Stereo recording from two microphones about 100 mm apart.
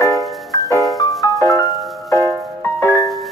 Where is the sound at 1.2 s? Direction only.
35° left (ahead or behind).